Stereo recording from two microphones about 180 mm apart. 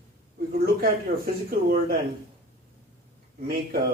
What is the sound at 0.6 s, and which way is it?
Speech, 55° right (ahead or behind).